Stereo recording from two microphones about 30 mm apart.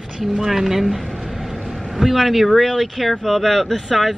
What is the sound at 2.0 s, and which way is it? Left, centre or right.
Speech, right.